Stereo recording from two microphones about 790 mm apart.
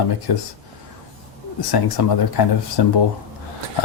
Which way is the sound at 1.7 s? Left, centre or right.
Left.